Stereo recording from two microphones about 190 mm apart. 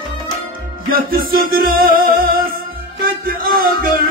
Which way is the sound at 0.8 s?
50° right (ahead or behind).